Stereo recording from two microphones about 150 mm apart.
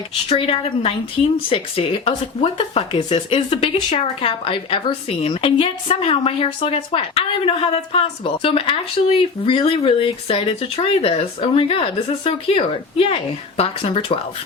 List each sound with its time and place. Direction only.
0.3 s speech: 40° left (ahead or behind)